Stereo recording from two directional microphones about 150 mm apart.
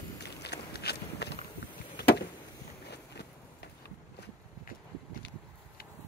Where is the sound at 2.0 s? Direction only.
90° left.